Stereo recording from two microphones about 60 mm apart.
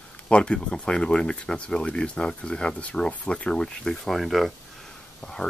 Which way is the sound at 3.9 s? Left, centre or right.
Centre.